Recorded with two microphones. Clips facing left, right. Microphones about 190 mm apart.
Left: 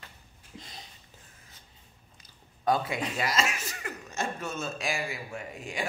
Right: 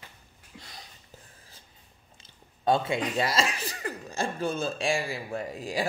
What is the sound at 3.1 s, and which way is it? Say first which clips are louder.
Speech: right 3 dB; 30° right (ahead or behind).